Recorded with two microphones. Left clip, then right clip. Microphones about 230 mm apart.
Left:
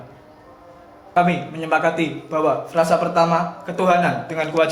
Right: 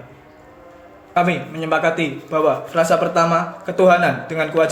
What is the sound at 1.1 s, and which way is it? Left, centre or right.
A man's voice, right.